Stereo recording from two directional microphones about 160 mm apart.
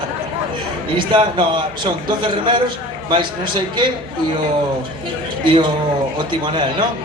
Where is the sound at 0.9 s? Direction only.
30° right (ahead or behind).